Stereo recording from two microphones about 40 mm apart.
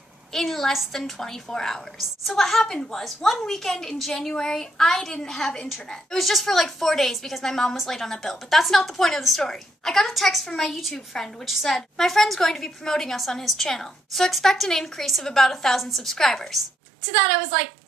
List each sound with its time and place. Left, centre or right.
0.3 s a woman's voice: centre
2.6 s a woman's voice: left
2.9 s a woman's voice: centre